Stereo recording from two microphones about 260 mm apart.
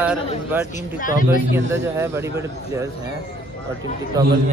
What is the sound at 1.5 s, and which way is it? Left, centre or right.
Speech, centre.